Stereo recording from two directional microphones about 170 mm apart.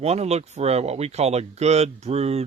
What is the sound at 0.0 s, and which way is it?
Speech, 40° right (ahead or behind).